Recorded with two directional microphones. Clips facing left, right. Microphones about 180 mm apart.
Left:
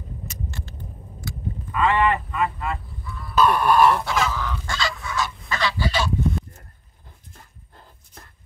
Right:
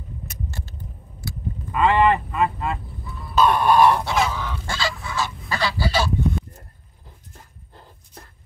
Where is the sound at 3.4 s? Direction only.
20° right (ahead or behind).